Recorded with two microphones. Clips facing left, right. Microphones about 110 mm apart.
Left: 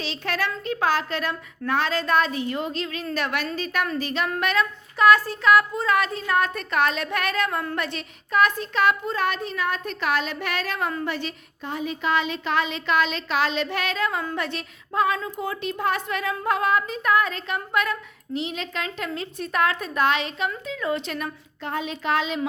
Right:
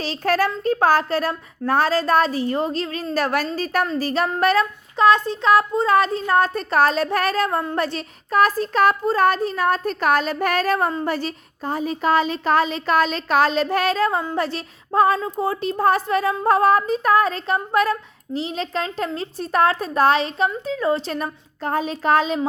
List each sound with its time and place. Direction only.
0.0 s child singing: 40° right (ahead or behind)